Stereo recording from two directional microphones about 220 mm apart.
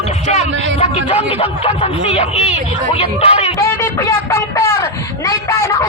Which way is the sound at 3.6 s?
15° left (ahead or behind).